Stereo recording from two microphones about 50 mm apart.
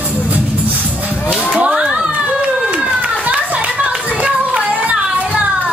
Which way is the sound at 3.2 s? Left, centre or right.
Right.